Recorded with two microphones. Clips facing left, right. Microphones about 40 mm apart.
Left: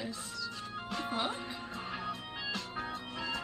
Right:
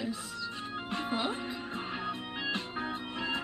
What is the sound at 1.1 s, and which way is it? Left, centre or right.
Speech, centre.